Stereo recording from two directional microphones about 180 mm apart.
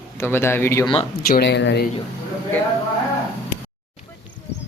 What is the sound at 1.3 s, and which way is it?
Speech, 70° left (ahead or behind).